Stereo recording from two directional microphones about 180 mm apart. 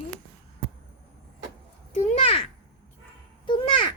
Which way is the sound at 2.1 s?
30° left (ahead or behind).